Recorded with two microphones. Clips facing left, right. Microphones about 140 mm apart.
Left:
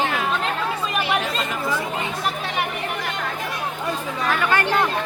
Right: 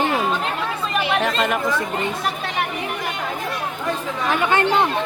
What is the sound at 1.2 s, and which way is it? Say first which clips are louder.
Speech: right 6 dB; 65° right (ahead or behind).